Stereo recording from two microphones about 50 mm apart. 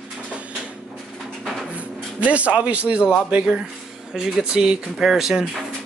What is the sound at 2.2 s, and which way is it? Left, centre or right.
Speech, right.